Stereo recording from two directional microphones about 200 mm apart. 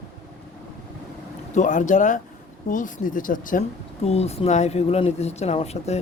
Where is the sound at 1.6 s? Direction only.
40° left (ahead or behind).